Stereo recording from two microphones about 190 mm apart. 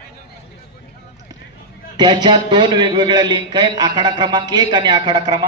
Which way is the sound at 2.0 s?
25° right (ahead or behind).